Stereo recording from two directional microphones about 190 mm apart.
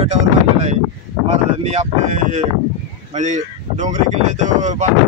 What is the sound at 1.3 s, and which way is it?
Speech, 35° right (ahead or behind).